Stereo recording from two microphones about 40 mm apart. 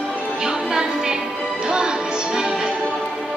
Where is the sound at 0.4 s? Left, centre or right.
Centre.